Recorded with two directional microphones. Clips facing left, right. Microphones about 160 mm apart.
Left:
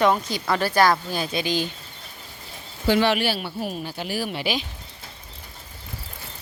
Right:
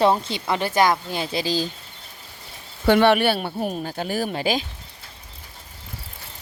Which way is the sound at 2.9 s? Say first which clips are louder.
Right 4 dB; 55° right (ahead or behind).